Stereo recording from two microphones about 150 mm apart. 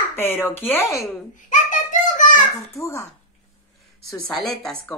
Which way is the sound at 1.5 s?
60° left (ahead or behind).